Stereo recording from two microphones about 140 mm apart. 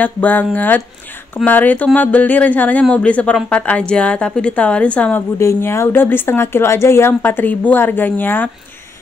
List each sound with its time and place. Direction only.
0.0 s speech: 10° left (ahead or behind)
5.4 s speech: 20° left (ahead or behind)